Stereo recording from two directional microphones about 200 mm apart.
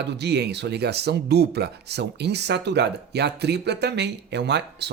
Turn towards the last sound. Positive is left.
turn(degrees=-55)  # may be behind; listen again after turning